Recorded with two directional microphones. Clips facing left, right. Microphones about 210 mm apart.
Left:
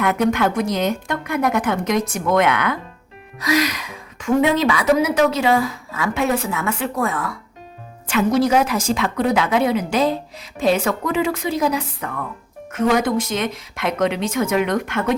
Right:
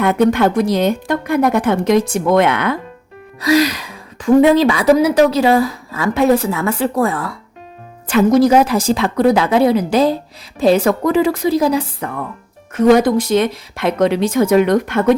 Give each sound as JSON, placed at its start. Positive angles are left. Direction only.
{"t": 0.0, "sound": "a woman's voice", "side_deg": -30}